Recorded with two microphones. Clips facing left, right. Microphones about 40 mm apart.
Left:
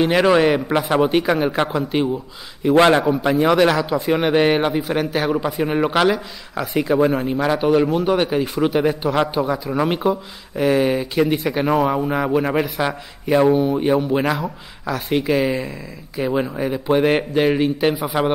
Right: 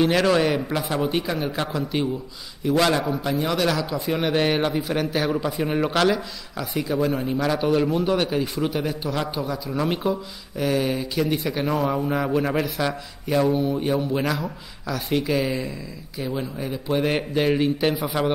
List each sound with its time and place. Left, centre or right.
0.0 s a man's voice: centre; by 3.4 s left
3.4 s a man's voice: left
12.4 s a man's voice: centre